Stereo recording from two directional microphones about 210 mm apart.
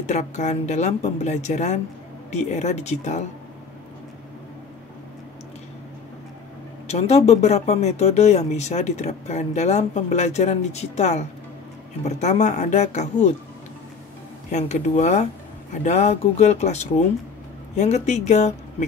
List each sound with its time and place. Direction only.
0.0 s speech: 35° left (ahead or behind)
6.9 s speech: 30° left (ahead or behind)
14.5 s speech: 35° left (ahead or behind)